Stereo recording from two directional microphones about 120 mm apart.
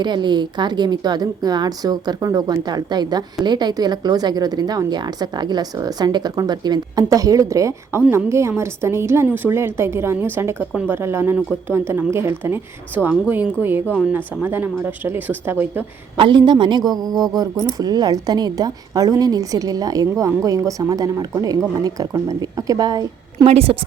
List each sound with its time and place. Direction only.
0.0 s a woman's voice: 40° right (ahead or behind); by 15.9 s 15° right (ahead or behind)
16.1 s a woman's voice: 45° right (ahead or behind)
23.5 s a woman's voice: 50° right (ahead or behind)